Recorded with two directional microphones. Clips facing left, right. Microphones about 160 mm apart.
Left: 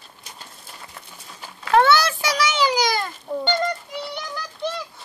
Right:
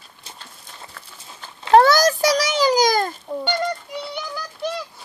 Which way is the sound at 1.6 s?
35° right (ahead or behind).